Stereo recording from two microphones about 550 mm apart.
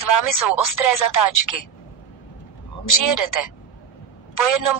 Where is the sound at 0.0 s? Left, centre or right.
Left.